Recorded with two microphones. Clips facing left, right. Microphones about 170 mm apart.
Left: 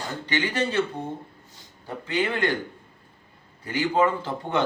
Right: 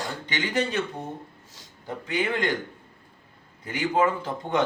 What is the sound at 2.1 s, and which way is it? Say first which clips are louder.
Speech: left 1 dB; 15° right (ahead or behind).